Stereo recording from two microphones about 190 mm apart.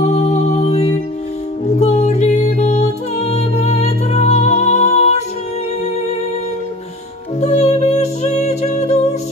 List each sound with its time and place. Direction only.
0.0 s music: 35° left (ahead or behind)
7.3 s music: 35° left (ahead or behind)